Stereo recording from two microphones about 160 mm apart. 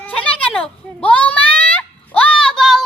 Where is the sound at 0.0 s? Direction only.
10° left (ahead or behind).